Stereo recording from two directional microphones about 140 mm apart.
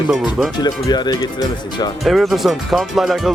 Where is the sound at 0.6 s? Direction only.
30° left (ahead or behind).